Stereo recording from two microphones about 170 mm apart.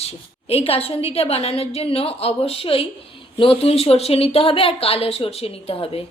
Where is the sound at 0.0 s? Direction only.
35° left (ahead or behind).